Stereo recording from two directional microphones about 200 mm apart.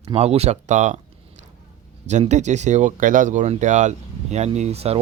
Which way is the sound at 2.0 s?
35° right (ahead or behind).